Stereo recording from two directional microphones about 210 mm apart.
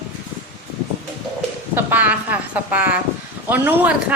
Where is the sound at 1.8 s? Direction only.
10° right (ahead or behind).